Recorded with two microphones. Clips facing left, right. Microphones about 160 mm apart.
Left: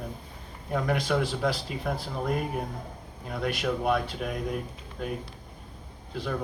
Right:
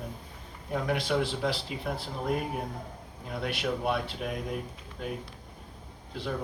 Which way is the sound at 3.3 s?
45° left (ahead or behind).